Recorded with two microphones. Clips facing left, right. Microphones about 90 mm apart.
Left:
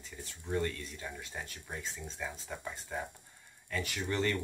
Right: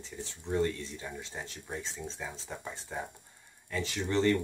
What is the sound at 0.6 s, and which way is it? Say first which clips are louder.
Speech: right 5 dB; 25° right (ahead or behind).